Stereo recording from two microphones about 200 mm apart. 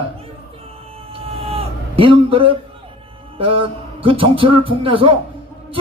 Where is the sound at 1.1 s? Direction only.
30° right (ahead or behind).